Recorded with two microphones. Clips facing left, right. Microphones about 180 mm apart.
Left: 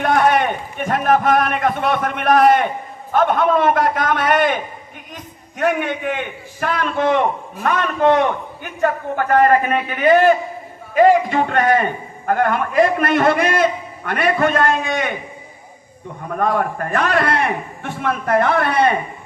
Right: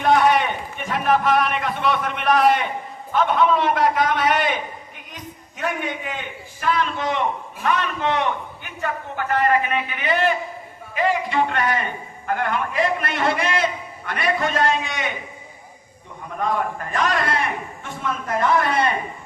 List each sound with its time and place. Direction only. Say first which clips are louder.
0.0 s a man's voice: left 1 dB; 50° left (ahead or behind)
16.2 s a man's voice: left 5 dB; 55° left (ahead or behind)